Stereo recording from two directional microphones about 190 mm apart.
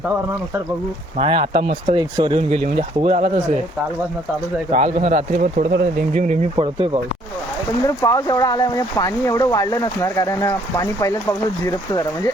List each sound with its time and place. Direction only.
1.1 s speech: 30° right (ahead or behind)
4.7 s speech: 30° right (ahead or behind)
6.6 s speech: 25° right (ahead or behind)
7.9 s speech: 15° left (ahead or behind)